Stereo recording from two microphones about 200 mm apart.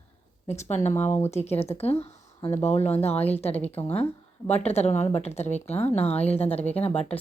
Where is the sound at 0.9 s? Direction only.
35° left (ahead or behind).